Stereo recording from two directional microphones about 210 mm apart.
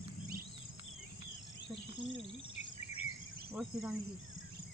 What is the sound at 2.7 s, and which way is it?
Cricket, 25° left (ahead or behind).